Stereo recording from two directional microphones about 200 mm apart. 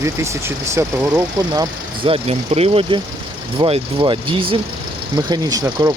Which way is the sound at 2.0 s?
30° right (ahead or behind).